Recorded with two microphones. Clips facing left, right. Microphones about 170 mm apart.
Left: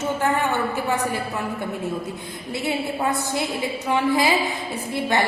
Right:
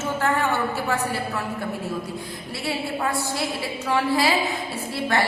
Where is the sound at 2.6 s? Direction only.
20° left (ahead or behind).